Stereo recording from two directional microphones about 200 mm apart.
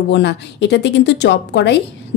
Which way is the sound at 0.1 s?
60° left (ahead or behind).